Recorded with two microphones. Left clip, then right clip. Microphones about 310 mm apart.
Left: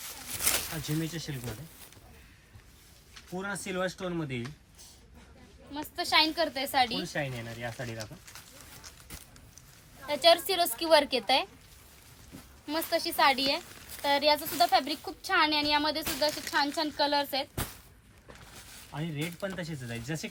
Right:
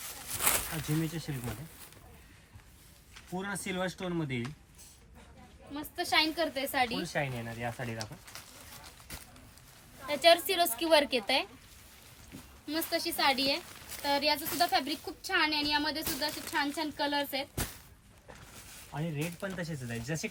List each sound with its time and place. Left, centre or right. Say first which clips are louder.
0.0 s a sound: even; centre
3.3 s speech: left 2 dB; centre
5.7 s speech: left 3 dB; centre
7.0 s speech: even; centre
10.1 s speech: left 1 dB; centre
12.6 s speech: left 3 dB; centre
18.9 s speech: left 1 dB; centre